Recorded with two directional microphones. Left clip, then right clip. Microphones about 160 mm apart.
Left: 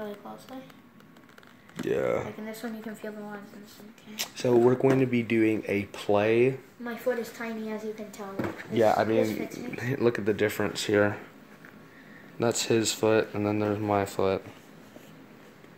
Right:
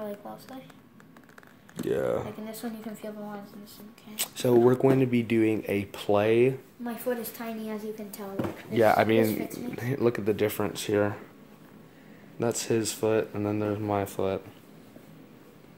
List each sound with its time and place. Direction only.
1.8 s speech: 5° right (ahead or behind)
4.1 s speech: 10° right (ahead or behind)
6.8 s a woman's voice: 75° right (ahead or behind)
8.9 s speech: 20° right (ahead or behind)
9.7 s speech: centre (ahead or behind)
12.4 s speech: 10° left (ahead or behind)